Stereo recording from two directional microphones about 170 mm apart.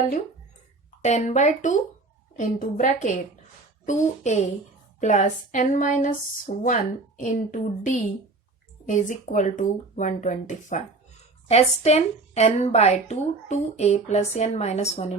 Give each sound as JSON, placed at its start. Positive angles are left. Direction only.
{"t": 1.0, "sound": "a woman's voice", "side_deg": 40}